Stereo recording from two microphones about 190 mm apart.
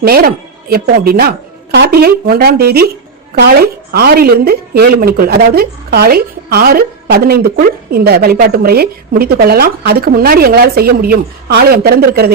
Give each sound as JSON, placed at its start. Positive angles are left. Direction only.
{"t": 0.0, "sound": "a woman's voice", "side_deg": -50}